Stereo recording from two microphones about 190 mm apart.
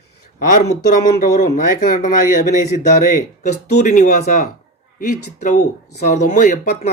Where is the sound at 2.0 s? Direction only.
45° left (ahead or behind).